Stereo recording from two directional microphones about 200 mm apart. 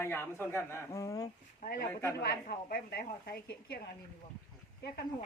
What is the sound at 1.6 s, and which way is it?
Speech, 45° left (ahead or behind).